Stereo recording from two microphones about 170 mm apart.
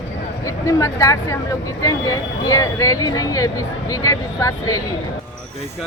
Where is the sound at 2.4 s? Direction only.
20° left (ahead or behind).